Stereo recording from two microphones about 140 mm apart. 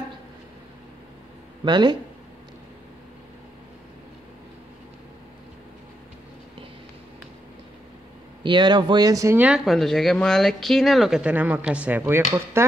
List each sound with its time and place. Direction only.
1.6 s speech: 30° right (ahead or behind)
8.5 s speech: 35° right (ahead or behind)
9.4 s speech: centre (ahead or behind)